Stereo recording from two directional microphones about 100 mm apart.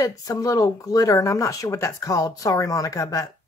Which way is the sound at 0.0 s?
35° left (ahead or behind).